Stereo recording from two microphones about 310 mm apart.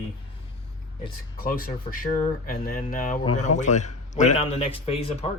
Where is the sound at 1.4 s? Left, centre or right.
Left.